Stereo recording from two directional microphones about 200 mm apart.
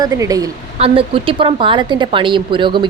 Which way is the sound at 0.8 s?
25° right (ahead or behind).